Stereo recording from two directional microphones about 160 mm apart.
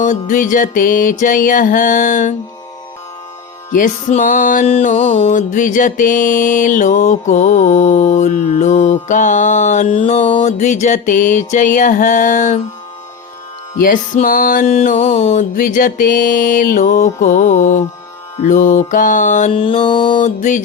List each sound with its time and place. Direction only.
0.0 s music: 55° left (ahead or behind)
3.7 s music: 50° left (ahead or behind)
4.8 s mantra: 50° left (ahead or behind)
13.8 s mantra: 55° left (ahead or behind)
19.5 s mantra: 35° left (ahead or behind)
20.2 s mantra: 50° left (ahead or behind)